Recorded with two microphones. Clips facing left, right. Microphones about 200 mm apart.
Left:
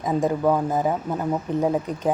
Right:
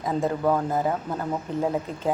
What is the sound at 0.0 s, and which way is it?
Speech, 15° left (ahead or behind).